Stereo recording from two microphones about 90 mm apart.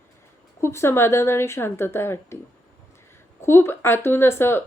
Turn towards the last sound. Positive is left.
turn(degrees=25)  # may be behind; listen again after turning